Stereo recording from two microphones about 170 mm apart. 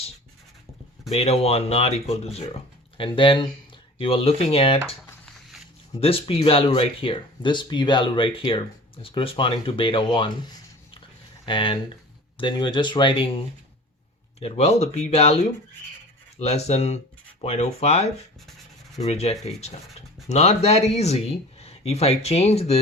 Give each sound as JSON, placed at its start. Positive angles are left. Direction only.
{"t": 1.1, "sound": "speech", "side_deg": 35}
{"t": 5.2, "sound": "a sound", "side_deg": 0}
{"t": 6.0, "sound": "speech", "side_deg": 35}
{"t": 14.3, "sound": "speech", "side_deg": 35}